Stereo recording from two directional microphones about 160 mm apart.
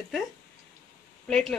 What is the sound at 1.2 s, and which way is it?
Speech, centre (ahead or behind).